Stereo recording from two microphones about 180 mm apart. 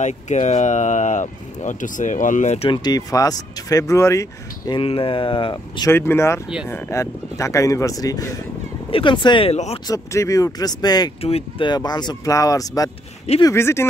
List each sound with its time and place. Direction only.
0.0 s speech: 40° left (ahead or behind)
2.7 s speech: 20° left (ahead or behind)
5.9 s speech: 15° left (ahead or behind); by 9.8 s 35° left (ahead or behind)
9.8 s speech: 20° left (ahead or behind)
11.2 s speech: 30° left (ahead or behind); by 13.8 s 15° left (ahead or behind)